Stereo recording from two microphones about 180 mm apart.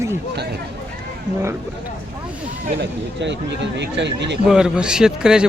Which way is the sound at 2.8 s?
75° right (ahead or behind).